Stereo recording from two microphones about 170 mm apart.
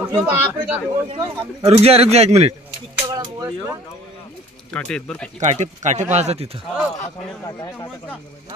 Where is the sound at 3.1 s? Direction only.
25° right (ahead or behind).